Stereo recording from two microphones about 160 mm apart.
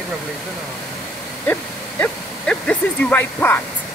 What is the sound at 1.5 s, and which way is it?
Speech, 5° left (ahead or behind).